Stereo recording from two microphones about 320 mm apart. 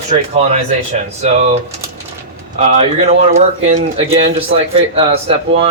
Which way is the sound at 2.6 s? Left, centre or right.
Centre.